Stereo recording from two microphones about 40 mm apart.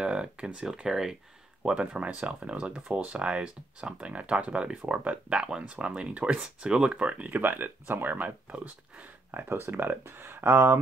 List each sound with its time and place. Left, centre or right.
0.0 s speech: right
0.8 s speech: centre
1.6 s speech: right
7.2 s speech: right
9.5 s speech: right
9.8 s speech: right